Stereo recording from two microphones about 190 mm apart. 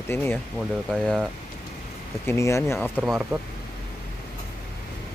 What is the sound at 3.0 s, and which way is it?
Speech, 5° right (ahead or behind).